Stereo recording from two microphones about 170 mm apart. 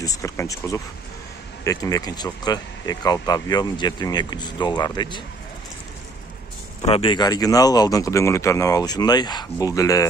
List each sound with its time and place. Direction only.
0.0 s speech: 20° left (ahead or behind)
6.8 s speech: 35° left (ahead or behind)